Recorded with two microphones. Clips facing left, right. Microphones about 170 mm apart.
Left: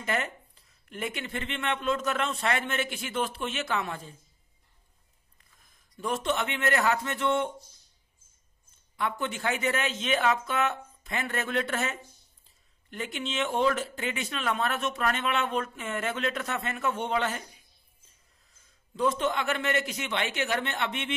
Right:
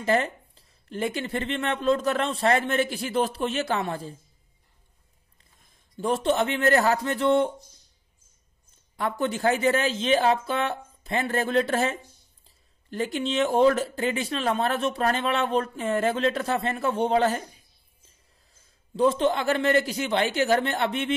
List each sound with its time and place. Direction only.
0.0 s speech: 30° right (ahead or behind)
5.9 s speech: 35° right (ahead or behind)
8.9 s speech: 35° right (ahead or behind)
18.5 s speech: 30° right (ahead or behind)